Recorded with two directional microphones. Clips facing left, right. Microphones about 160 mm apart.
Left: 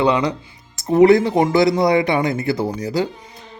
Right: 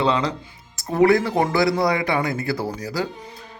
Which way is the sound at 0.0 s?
30° right (ahead or behind).